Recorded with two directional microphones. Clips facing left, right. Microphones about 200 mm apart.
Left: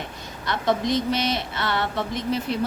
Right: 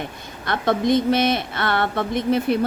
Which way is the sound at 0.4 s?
55° right (ahead or behind).